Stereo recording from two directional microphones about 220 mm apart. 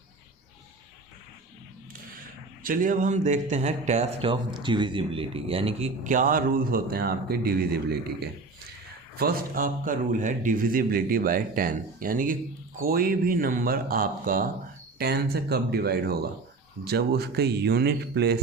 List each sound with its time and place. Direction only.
2.6 s speech: 40° right (ahead or behind)